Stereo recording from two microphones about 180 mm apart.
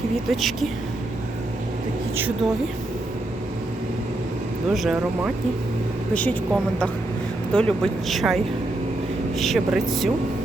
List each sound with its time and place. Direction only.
0.3 s speech: centre (ahead or behind)
4.7 s speech: centre (ahead or behind)
9.4 s speech: centre (ahead or behind)